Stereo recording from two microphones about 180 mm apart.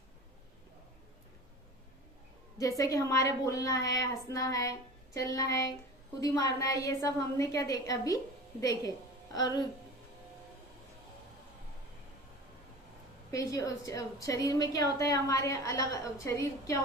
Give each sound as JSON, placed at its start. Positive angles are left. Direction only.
{"t": 2.6, "sound": "a woman's voice", "side_deg": 20}
{"t": 13.3, "sound": "a woman's voice", "side_deg": 15}